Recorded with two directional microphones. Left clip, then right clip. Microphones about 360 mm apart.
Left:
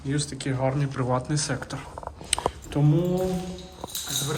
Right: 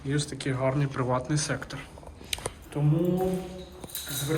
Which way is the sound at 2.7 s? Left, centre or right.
Left.